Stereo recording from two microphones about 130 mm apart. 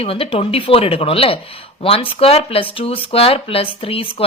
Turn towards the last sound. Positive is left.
turn(degrees=45)  # may be behind; listen again after turning